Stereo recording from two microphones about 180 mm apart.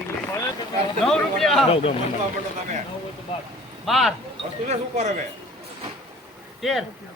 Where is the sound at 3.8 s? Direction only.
Centre (ahead or behind).